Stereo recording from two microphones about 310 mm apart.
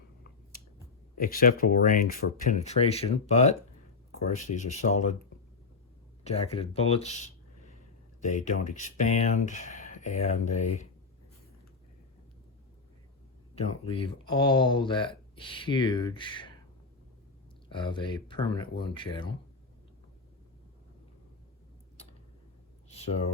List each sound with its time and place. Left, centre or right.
1.2 s speech: left
4.5 s speech: left
6.2 s speech: centre
13.6 s speech: centre
17.7 s speech: centre